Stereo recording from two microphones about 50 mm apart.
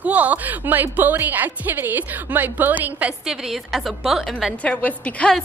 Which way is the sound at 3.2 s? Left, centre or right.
Centre.